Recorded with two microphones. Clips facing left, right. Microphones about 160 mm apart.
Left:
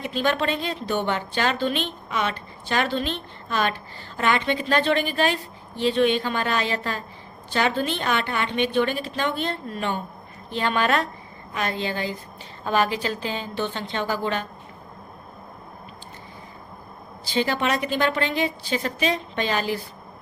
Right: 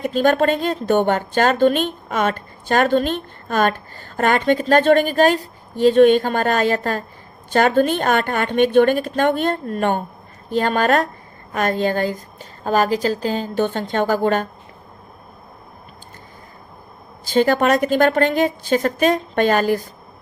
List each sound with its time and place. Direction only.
0.0 s a woman's voice: 45° right (ahead or behind)
17.2 s a woman's voice: 50° right (ahead or behind)